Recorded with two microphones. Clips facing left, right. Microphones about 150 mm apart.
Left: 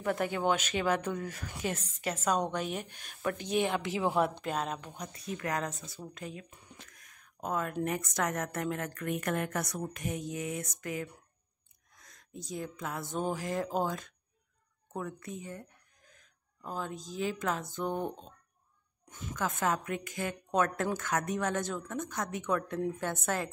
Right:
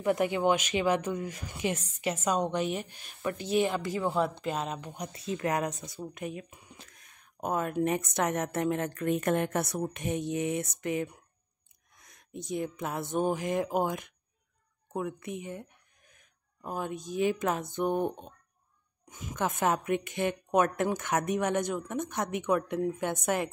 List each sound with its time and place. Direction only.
0.0 s a woman's voice: 10° right (ahead or behind)
19.6 s speech: 20° right (ahead or behind)